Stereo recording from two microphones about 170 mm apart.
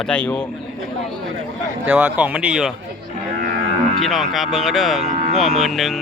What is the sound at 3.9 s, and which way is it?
Speech, centre (ahead or behind).